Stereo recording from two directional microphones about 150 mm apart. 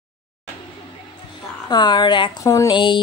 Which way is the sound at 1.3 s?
30° left (ahead or behind).